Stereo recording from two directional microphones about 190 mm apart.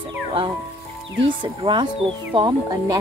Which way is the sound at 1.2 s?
25° right (ahead or behind).